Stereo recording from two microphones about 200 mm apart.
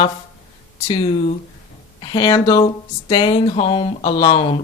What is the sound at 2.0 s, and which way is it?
Speech, 20° left (ahead or behind).